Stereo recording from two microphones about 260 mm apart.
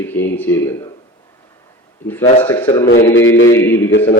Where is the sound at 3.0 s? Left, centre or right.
Left.